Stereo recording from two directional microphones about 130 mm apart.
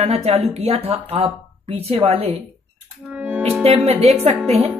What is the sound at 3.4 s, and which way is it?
Speech, 50° right (ahead or behind).